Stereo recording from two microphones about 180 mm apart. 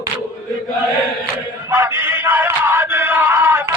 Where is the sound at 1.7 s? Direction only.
15° right (ahead or behind).